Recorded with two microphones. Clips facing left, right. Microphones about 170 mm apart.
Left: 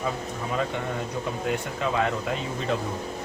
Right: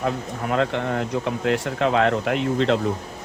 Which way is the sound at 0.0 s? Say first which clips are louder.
Right 4 dB; 75° right (ahead or behind).